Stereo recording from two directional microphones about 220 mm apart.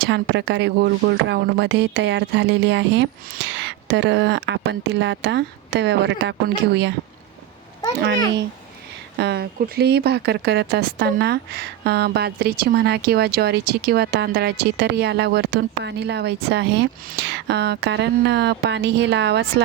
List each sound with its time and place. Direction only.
0.0 s speech: 50° right (ahead or behind)
8.0 s speech: 50° right (ahead or behind)